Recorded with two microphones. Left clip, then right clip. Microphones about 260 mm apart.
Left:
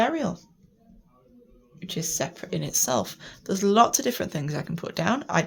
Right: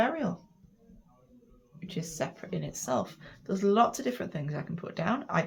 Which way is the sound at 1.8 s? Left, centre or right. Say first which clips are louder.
Left 6 dB; left.